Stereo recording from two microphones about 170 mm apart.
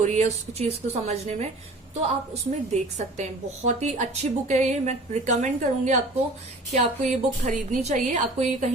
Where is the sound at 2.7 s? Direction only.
40° right (ahead or behind).